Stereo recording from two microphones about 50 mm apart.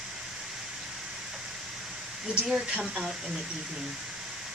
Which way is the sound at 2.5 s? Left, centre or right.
Right.